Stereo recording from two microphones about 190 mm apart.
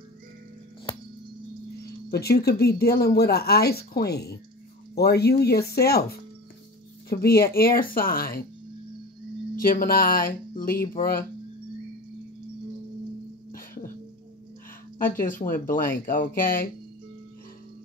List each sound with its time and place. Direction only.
2.0 s speech: 55° left (ahead or behind)
9.6 s speech: 50° left (ahead or behind)
15.1 s speech: 45° left (ahead or behind)